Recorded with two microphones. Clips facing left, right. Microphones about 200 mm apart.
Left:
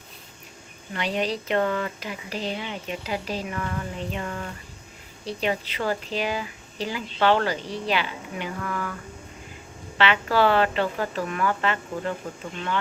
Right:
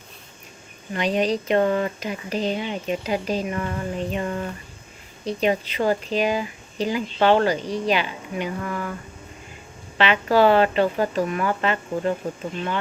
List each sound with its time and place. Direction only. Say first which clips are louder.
0.9 s speech: right 5 dB; 20° right (ahead or behind)
10.0 s a woman's voice: right 3 dB; 15° right (ahead or behind)